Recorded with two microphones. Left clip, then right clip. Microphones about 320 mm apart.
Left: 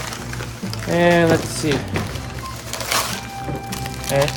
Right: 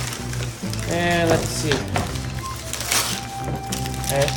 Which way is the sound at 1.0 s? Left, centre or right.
Centre.